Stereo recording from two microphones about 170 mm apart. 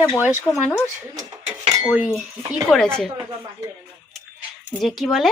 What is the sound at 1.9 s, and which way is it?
Speech, 5° right (ahead or behind).